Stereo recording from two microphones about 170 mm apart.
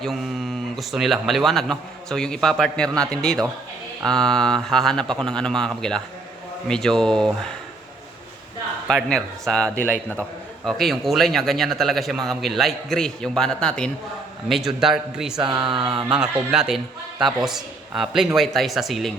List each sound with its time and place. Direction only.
0.0 s a man's voice: centre (ahead or behind)
2.9 s a sound: 20° right (ahead or behind)
4.0 s a man's voice: 5° left (ahead or behind)
8.9 s a man's voice: 5° left (ahead or behind)
15.4 s a sound: 30° right (ahead or behind)
16.0 s a man's voice: 5° right (ahead or behind)